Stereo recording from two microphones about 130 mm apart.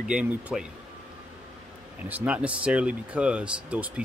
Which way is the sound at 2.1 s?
10° right (ahead or behind).